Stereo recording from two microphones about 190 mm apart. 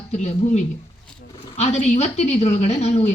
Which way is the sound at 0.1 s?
35° left (ahead or behind).